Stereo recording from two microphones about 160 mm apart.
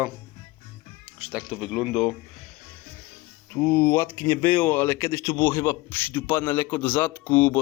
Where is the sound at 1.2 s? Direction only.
10° right (ahead or behind).